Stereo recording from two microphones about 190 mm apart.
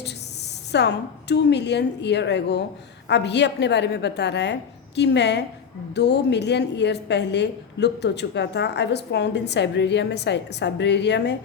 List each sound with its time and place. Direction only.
0.7 s a woman's voice: 65° left (ahead or behind)